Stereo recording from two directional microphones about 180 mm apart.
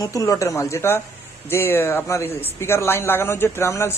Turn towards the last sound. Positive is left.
turn(degrees=15)  # may be behind; listen again after turning